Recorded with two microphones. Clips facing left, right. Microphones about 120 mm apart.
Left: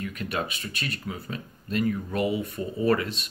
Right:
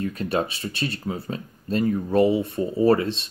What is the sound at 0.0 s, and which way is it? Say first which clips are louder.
Speech: right 6 dB; 30° right (ahead or behind).